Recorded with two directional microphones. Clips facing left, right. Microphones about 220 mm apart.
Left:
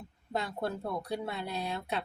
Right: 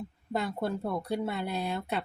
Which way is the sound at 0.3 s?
Centre (ahead or behind).